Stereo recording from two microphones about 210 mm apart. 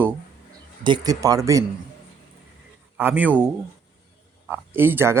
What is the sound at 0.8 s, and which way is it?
Speech, 20° right (ahead or behind).